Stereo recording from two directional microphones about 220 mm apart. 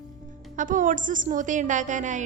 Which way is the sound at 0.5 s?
35° right (ahead or behind).